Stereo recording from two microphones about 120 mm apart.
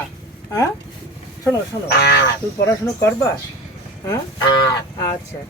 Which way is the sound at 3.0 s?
20° left (ahead or behind).